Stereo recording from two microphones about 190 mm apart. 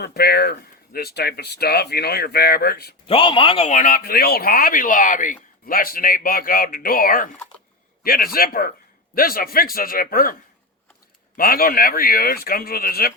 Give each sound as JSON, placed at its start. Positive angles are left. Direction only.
{"t": 0.0, "sound": "speech", "side_deg": 55}
{"t": 3.1, "sound": "speech", "side_deg": 25}
{"t": 11.3, "sound": "speech", "side_deg": 50}